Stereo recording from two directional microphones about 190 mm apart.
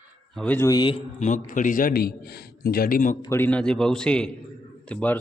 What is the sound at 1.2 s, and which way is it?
A man's voice, 40° left (ahead or behind).